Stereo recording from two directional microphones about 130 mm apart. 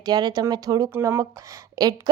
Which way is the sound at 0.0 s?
30° right (ahead or behind).